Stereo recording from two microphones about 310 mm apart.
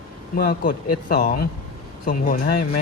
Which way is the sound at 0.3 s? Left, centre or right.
Left.